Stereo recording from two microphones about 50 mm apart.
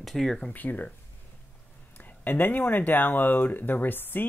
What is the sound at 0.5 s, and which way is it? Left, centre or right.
Speech, left.